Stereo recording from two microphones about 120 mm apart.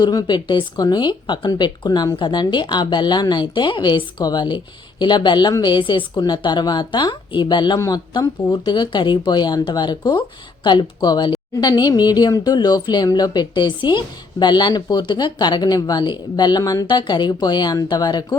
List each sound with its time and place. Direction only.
0.0 s speech: 35° left (ahead or behind)